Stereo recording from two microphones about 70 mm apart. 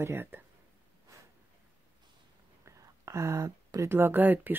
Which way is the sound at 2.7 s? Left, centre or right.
Right.